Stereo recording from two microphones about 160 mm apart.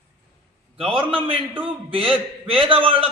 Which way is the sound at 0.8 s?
35° right (ahead or behind).